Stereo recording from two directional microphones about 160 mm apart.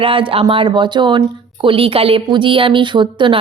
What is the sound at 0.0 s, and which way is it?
A woman's voice, 35° right (ahead or behind).